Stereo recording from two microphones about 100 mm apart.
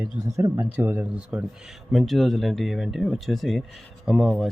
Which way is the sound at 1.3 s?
5° right (ahead or behind).